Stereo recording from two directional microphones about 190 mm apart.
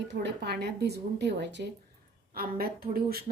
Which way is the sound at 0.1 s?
65° right (ahead or behind).